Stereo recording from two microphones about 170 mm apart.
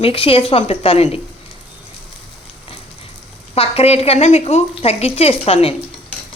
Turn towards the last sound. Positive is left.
turn(degrees=35)  # may be behind; listen again after turning